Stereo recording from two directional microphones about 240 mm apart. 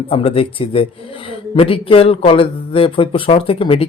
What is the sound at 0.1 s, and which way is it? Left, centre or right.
Speech, left.